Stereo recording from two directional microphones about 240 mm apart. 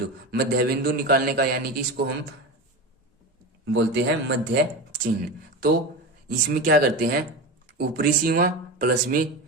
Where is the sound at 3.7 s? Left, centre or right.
Right.